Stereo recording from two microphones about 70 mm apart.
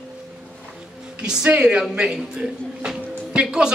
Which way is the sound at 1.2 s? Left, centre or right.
Centre.